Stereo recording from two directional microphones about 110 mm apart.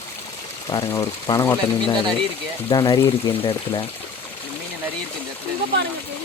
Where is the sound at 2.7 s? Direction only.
40° left (ahead or behind).